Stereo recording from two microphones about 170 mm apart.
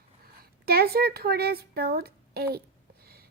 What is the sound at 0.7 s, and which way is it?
A woman's voice, 65° right (ahead or behind).